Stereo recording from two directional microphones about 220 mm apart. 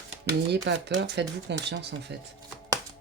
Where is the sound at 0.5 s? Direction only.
50° right (ahead or behind).